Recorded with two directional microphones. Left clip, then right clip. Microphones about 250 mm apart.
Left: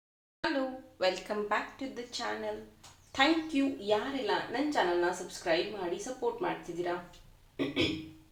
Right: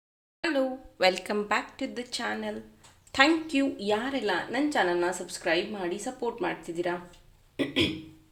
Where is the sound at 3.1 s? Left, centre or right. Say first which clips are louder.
Right 5 dB; right.